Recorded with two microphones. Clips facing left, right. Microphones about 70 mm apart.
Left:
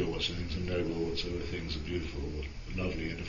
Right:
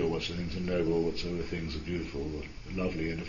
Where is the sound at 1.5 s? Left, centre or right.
Centre.